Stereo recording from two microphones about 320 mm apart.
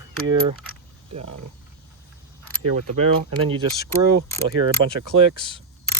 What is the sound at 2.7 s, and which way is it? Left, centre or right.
Speech, right.